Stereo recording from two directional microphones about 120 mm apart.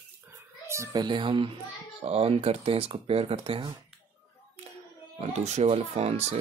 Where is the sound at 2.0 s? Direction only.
55° right (ahead or behind).